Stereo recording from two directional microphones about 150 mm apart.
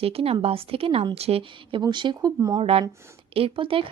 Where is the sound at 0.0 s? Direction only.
40° right (ahead or behind); by 2.6 s 25° right (ahead or behind).